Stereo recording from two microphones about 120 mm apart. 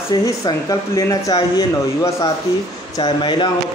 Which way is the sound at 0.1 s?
30° left (ahead or behind).